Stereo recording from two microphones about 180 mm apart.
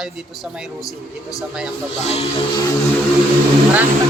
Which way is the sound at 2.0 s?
35° left (ahead or behind).